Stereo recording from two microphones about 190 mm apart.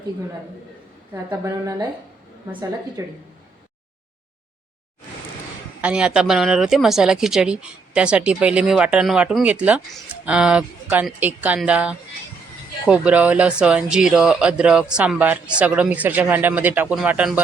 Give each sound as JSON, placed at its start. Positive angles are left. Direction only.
{"t": 1.1, "sound": "speech", "side_deg": -10}
{"t": 3.0, "sound": "speech", "side_deg": -15}
{"t": 5.8, "sound": "speech", "side_deg": -5}